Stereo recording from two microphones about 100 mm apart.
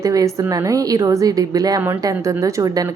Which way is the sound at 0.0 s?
35° right (ahead or behind).